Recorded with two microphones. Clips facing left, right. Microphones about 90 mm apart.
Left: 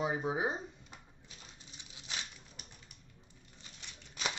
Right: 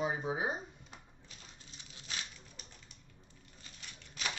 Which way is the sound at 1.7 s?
20° left (ahead or behind).